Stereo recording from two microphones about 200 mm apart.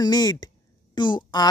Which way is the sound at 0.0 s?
20° left (ahead or behind).